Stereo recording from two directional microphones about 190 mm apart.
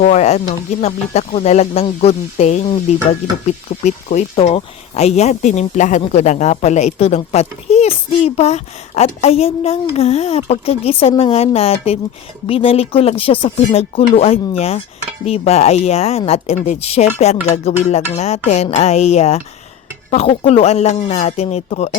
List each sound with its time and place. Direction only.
0.0 s speech: 35° left (ahead or behind)